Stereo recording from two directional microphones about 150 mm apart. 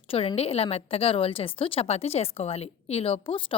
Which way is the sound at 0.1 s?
40° left (ahead or behind).